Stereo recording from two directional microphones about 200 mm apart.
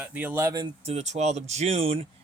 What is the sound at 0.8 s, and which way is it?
Speech, 35° right (ahead or behind).